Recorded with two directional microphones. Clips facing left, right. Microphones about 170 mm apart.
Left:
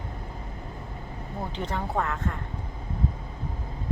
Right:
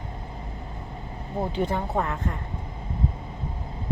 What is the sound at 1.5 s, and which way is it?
Speech, 10° right (ahead or behind).